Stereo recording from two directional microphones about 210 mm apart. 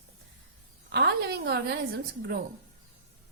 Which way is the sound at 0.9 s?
50° right (ahead or behind).